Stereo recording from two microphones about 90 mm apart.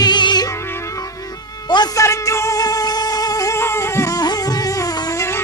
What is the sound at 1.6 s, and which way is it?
Music, 50° left (ahead or behind).